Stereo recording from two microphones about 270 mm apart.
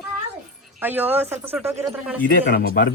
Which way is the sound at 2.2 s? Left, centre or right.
Left.